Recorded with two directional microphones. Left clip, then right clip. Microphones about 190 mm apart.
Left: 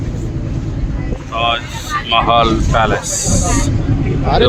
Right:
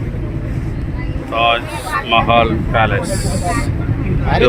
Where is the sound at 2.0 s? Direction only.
10° left (ahead or behind).